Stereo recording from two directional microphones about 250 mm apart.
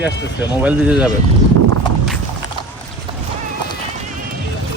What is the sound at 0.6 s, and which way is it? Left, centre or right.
Speech, centre.